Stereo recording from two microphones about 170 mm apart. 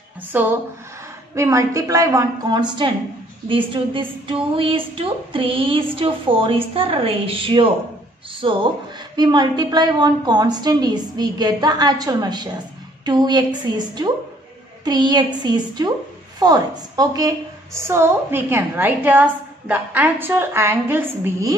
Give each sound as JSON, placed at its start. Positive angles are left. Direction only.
{"t": 0.3, "sound": "a woman's voice", "side_deg": -10}